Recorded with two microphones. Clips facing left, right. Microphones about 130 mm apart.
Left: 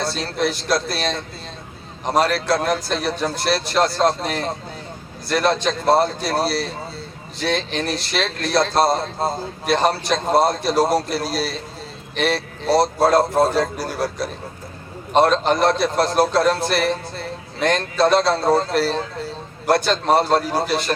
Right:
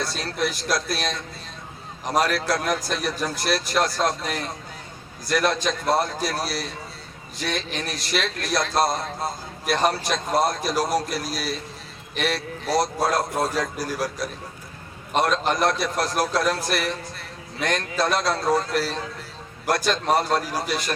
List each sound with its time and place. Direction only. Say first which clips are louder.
0.0 s a man's voice: left 4 dB; 30° left (ahead or behind)